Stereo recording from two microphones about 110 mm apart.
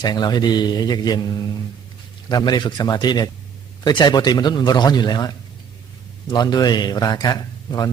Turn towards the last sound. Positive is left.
turn(degrees=35)  # may be behind; listen again after turning